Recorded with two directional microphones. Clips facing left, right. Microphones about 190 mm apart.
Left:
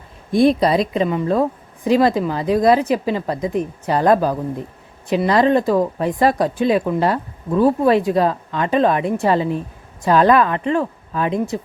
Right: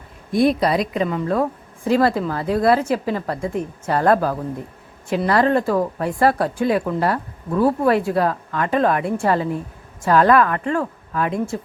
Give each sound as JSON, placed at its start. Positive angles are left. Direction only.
{"t": 0.3, "sound": "a woman's voice", "side_deg": 25}